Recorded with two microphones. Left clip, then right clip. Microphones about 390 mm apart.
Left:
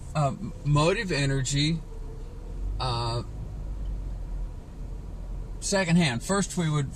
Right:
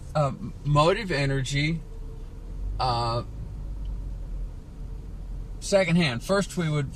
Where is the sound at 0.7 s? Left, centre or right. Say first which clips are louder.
Right 3 dB; right.